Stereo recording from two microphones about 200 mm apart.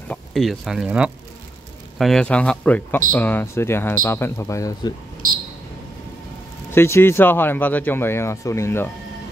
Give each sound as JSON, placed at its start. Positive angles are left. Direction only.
{"t": 0.1, "sound": "speech", "side_deg": 0}
{"t": 5.2, "sound": "a sound", "side_deg": -45}
{"t": 6.7, "sound": "speech", "side_deg": 10}